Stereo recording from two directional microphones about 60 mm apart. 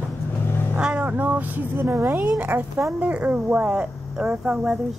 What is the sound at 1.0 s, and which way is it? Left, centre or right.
Speech, right.